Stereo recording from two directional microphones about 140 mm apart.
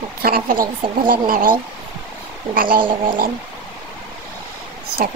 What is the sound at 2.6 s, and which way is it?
Speech, 35° right (ahead or behind).